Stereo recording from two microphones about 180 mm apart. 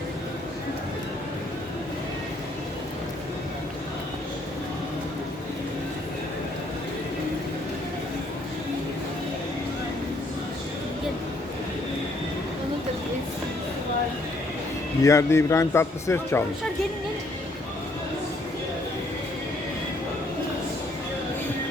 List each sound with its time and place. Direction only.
15.0 s speech: 15° left (ahead or behind)